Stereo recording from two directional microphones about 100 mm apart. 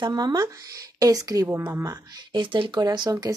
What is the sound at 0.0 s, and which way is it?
Speech, 45° right (ahead or behind).